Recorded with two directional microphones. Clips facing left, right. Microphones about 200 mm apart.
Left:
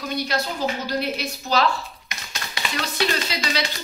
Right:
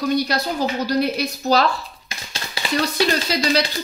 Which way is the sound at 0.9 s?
40° right (ahead or behind).